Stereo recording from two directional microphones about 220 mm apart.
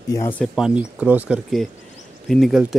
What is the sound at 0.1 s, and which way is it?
Speech, 15° left (ahead or behind).